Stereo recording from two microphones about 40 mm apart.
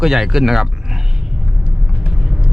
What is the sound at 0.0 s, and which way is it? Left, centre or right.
Speech, centre.